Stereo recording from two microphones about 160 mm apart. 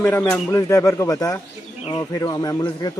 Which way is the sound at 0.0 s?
10° left (ahead or behind).